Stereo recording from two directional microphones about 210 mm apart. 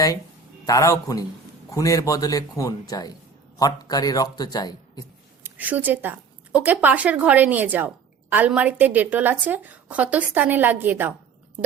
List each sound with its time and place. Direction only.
0.6 s a man's voice: 15° left (ahead or behind)
5.4 s a woman's voice: 10° right (ahead or behind)